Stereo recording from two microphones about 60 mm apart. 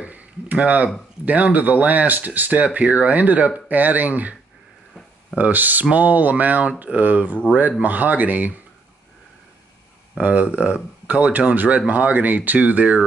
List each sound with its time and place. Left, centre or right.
0.0 s a sound: right
1.2 s speech: right
5.4 s speech: right
10.2 s speech: right